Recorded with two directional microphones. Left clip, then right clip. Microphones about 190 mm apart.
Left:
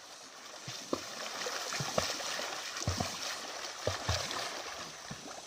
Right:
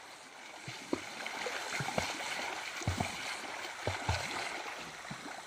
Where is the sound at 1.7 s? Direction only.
20° left (ahead or behind).